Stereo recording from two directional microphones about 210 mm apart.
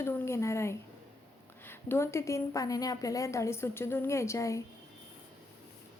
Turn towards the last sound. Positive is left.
turn(degrees=15)  # may be behind; listen again after turning